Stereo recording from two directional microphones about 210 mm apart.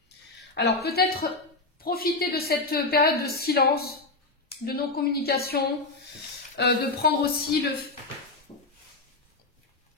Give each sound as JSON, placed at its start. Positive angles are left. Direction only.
{"t": 0.6, "sound": "a woman's voice", "side_deg": 50}